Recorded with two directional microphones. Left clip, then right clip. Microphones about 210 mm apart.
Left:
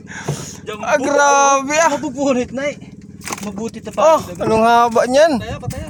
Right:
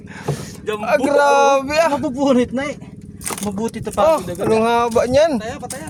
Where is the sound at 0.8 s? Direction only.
Centre (ahead or behind).